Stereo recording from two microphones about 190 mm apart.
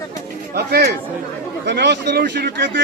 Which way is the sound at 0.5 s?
60° right (ahead or behind).